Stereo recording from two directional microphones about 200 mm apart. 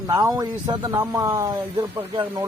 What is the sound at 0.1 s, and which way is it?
Speech, 15° right (ahead or behind).